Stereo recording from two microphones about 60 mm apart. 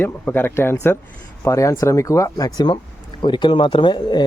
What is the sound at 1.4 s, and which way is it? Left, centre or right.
Speech, left.